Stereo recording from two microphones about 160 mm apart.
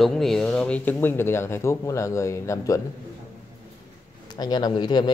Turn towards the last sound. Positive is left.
turn(degrees=25)  # may be behind; listen again after turning